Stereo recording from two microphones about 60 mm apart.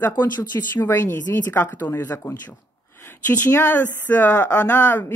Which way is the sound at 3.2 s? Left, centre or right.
Left.